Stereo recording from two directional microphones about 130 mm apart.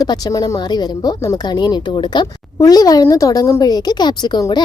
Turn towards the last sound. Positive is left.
turn(degrees=30)  # may be behind; listen again after turning